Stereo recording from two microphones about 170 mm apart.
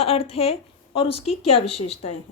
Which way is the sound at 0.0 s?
35° left (ahead or behind).